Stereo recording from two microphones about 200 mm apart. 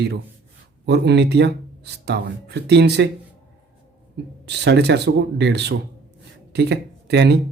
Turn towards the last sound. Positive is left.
turn(degrees=-55)  # may be behind; listen again after turning